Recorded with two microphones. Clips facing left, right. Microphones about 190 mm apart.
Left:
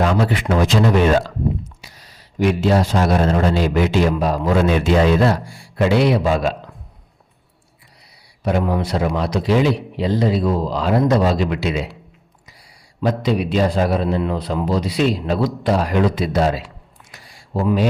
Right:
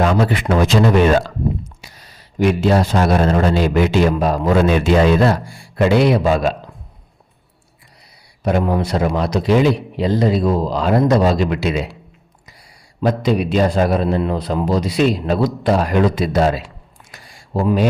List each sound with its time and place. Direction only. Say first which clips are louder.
0.0 s a man's voice: right 2 dB; 55° right (ahead or behind)
8.4 s a man's voice: right 2 dB; 45° right (ahead or behind)
13.0 s a man's voice: right 2 dB; 45° right (ahead or behind)